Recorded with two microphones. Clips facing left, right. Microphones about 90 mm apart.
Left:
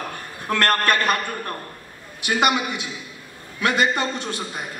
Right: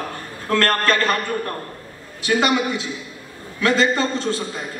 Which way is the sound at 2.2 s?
15° left (ahead or behind).